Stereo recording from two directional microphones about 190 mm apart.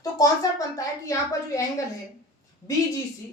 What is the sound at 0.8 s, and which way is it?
Speech, 15° left (ahead or behind).